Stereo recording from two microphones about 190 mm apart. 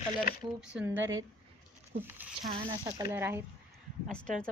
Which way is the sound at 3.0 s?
15° right (ahead or behind).